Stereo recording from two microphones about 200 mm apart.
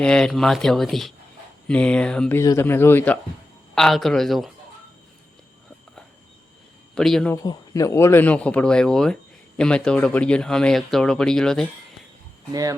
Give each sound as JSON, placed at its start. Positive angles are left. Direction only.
{"t": 0.0, "sound": "speech", "side_deg": 5}
{"t": 6.9, "sound": "speech", "side_deg": 0}
{"t": 7.4, "sound": "speech", "side_deg": 15}
{"t": 12.5, "sound": "speech", "side_deg": -15}